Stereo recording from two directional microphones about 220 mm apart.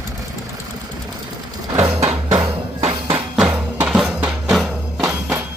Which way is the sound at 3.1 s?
5° right (ahead or behind).